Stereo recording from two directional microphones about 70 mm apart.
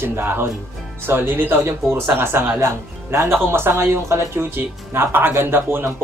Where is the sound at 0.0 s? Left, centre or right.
Right.